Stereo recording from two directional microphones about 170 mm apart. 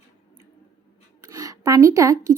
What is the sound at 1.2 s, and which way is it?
Speech, 20° right (ahead or behind).